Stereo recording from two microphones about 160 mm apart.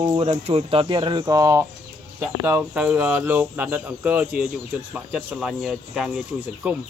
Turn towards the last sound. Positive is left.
turn(degrees=-10)  # may be behind; listen again after turning